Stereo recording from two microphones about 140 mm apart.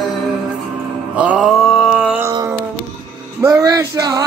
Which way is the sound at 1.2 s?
5° right (ahead or behind).